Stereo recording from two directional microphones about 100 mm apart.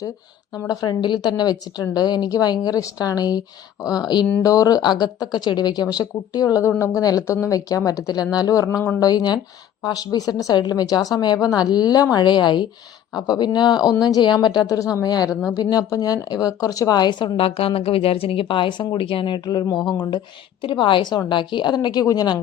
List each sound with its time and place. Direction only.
0.5 s a woman's voice: 40° left (ahead or behind)
4.4 s a woman's voice: 35° left (ahead or behind)
17.3 s a woman's voice: 70° left (ahead or behind); by 22.4 s 40° left (ahead or behind)